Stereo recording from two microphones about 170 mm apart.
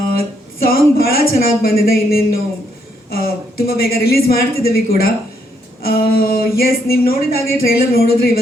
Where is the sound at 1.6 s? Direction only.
60° left (ahead or behind).